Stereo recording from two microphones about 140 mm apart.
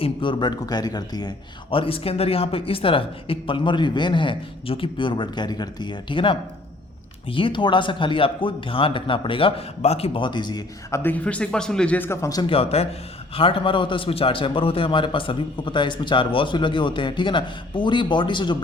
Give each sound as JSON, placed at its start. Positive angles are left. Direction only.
{"t": 0.0, "sound": "a man's voice", "side_deg": 35}
{"t": 1.7, "sound": "a man's voice", "side_deg": 40}
{"t": 10.9, "sound": "a man's voice", "side_deg": 15}
{"t": 12.5, "sound": "a man's voice", "side_deg": 45}